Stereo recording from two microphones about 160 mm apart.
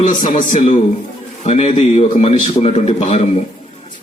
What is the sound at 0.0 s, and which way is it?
A man's voice, 55° left (ahead or behind).